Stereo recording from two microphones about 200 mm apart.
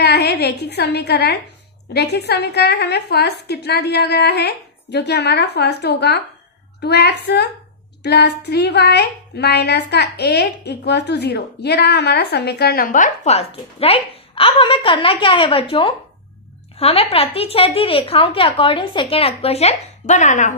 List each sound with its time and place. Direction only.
0.0 s a woman's voice: 55° left (ahead or behind); by 20.5 s 35° left (ahead or behind)